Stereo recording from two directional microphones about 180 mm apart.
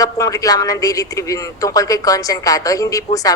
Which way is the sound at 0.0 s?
20° left (ahead or behind).